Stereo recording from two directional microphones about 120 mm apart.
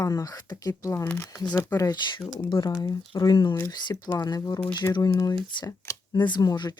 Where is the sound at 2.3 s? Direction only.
45° left (ahead or behind).